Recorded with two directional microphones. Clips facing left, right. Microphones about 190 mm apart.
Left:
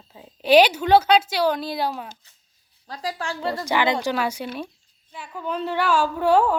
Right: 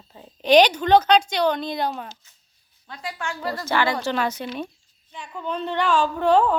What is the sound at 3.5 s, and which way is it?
A woman's voice, 15° left (ahead or behind).